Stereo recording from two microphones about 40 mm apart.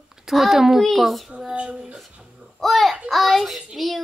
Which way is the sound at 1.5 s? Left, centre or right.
Right.